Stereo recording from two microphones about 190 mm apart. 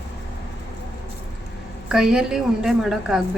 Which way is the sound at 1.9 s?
5° right (ahead or behind).